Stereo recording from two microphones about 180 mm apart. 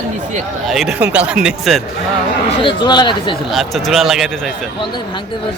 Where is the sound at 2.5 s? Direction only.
25° left (ahead or behind).